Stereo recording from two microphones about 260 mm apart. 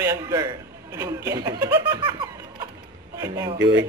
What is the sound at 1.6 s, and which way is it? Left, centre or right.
Laughter, centre.